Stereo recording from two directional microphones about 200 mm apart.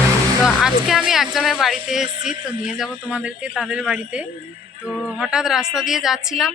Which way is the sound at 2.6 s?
5° right (ahead or behind).